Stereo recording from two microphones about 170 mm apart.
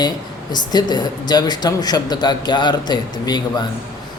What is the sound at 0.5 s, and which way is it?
Speech, 25° left (ahead or behind).